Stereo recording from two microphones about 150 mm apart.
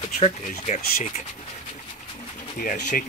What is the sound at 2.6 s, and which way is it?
Speech, 65° left (ahead or behind).